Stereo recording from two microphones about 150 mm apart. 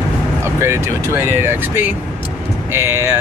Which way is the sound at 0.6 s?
15° right (ahead or behind).